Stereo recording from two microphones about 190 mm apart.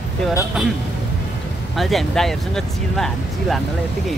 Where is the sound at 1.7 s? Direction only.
Centre (ahead or behind).